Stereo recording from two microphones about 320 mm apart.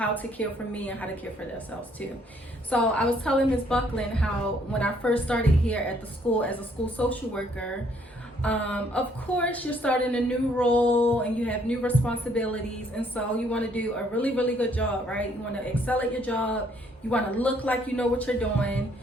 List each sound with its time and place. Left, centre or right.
0.0 s a woman's voice: centre
2.6 s a woman's voice: centre